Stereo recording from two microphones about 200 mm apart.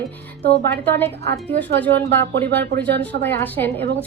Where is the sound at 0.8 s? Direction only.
10° left (ahead or behind).